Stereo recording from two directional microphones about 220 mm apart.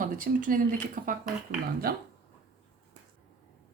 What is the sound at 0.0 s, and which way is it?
Speech, 40° right (ahead or behind).